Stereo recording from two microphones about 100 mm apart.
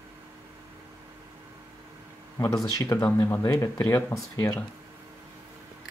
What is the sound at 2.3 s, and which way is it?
Speech, 30° left (ahead or behind).